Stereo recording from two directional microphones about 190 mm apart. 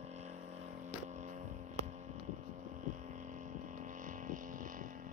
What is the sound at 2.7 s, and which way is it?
Hum, 40° right (ahead or behind).